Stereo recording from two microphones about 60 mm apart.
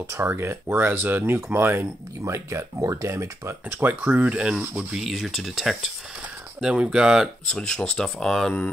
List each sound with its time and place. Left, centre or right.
0.2 s speech: right
2.2 s speech: right
3.8 s speech: right
4.3 s speech: centre
6.6 s speech: centre
7.4 s speech: centre